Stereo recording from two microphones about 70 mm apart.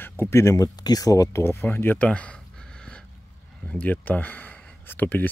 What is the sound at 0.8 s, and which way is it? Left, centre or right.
Speech, left.